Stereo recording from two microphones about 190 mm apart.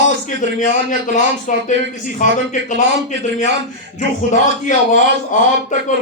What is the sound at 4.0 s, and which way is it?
A man's voice, 40° left (ahead or behind).